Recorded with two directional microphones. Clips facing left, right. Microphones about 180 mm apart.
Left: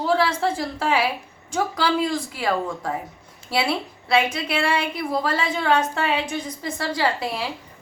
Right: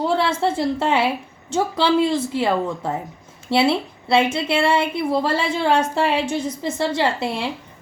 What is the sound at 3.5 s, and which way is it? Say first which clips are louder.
A woman's voice: right 6 dB; 25° right (ahead or behind).